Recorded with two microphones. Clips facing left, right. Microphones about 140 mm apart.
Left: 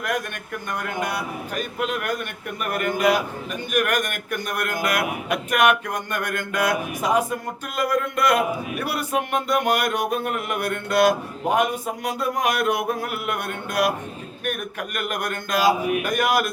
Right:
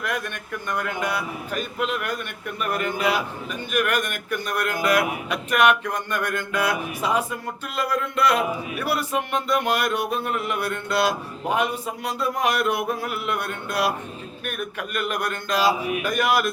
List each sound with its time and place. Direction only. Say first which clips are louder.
0.0 s speech: left 2 dB; 45° left (ahead or behind)